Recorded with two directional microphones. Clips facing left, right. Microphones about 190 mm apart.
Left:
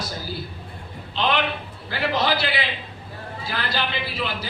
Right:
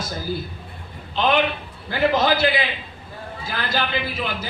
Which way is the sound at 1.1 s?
50° right (ahead or behind).